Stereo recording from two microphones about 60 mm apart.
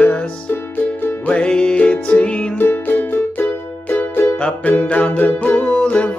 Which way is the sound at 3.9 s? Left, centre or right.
Left.